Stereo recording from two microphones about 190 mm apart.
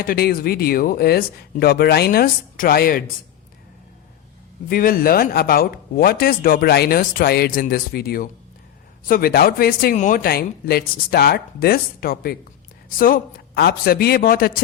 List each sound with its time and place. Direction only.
0.0 s speech: 50° left (ahead or behind)
4.7 s speech: 50° left (ahead or behind)